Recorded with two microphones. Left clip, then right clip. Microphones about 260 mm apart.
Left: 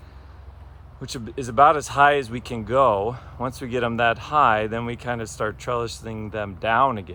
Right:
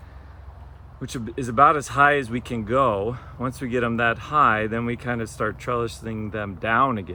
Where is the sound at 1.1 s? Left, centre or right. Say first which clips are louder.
Right 1 dB; left.